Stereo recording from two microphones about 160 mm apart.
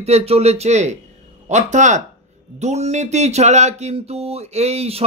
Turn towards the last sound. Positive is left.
turn(degrees=-40)  # may be behind; listen again after turning